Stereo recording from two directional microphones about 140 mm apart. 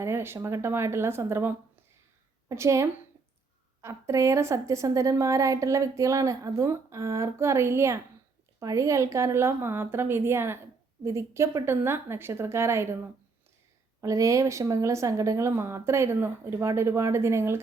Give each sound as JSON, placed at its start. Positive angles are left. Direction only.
{"t": 0.0, "sound": "a woman's voice", "side_deg": -15}
{"t": 14.0, "sound": "a woman's voice", "side_deg": -25}